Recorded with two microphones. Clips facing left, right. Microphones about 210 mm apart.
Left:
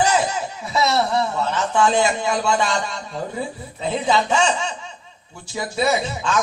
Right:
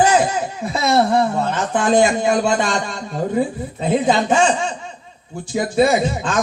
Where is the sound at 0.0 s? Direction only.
55° right (ahead or behind).